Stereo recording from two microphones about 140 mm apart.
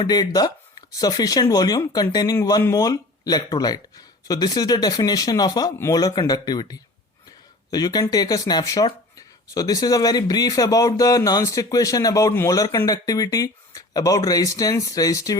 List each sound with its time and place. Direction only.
0.0 s speech: 30° left (ahead or behind)